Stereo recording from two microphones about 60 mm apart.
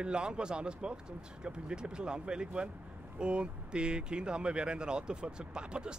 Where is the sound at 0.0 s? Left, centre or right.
Centre.